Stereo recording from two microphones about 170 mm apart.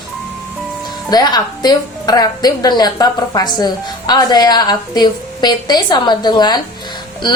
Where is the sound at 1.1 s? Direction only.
25° left (ahead or behind).